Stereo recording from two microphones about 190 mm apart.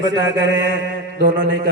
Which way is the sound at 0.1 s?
70° right (ahead or behind).